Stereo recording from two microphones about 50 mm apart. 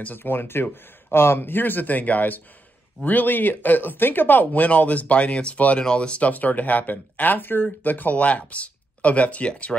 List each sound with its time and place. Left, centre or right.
0.0 s speech: left